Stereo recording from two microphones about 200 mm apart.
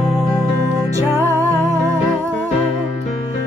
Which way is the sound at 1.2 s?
15° right (ahead or behind).